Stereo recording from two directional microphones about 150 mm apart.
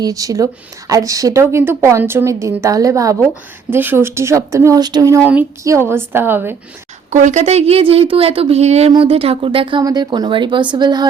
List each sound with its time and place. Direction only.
0.0 s speech: 25° right (ahead or behind)
5.2 s a woman's voice: 10° right (ahead or behind)
7.1 s speech: 55° right (ahead or behind); by 11.1 s 30° right (ahead or behind)